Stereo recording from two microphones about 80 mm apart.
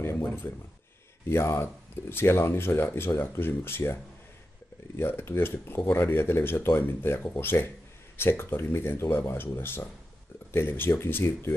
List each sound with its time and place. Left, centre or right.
0.0 s speech: left
1.3 s speech: left